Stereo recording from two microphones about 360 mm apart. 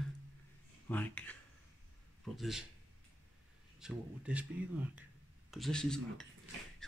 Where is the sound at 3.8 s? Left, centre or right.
Centre.